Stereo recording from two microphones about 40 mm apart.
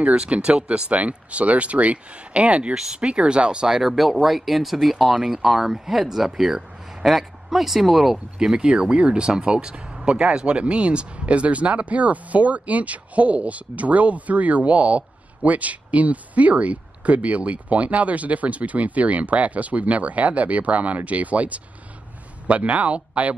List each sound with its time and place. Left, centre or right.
0.1 s speech: right
2.7 s speech: centre
3.0 s speech: right
3.6 s speech: centre
8.5 s speech: right